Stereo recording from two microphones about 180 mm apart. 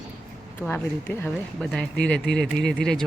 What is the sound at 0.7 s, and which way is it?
Speech, 15° left (ahead or behind).